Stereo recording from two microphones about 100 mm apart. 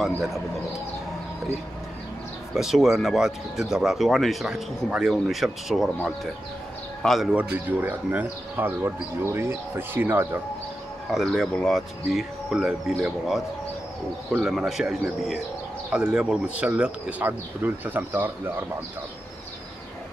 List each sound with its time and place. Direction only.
0.0 s speech: centre (ahead or behind)
2.5 s speech: 5° right (ahead or behind)
7.3 s speech: 15° right (ahead or behind)
11.1 s speech: centre (ahead or behind)
14.3 s speech: centre (ahead or behind); by 18.7 s 20° right (ahead or behind)